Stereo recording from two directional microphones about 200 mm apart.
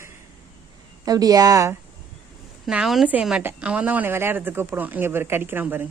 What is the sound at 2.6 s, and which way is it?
A woman's voice, centre (ahead or behind).